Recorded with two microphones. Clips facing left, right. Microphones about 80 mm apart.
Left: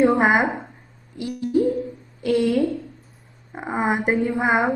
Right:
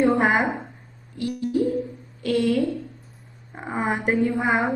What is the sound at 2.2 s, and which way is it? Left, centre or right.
A woman's voice, centre.